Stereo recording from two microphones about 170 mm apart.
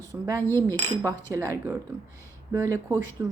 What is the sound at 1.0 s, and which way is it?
A woman's voice, 15° right (ahead or behind).